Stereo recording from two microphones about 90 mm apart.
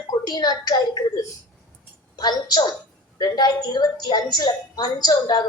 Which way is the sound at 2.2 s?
50° left (ahead or behind).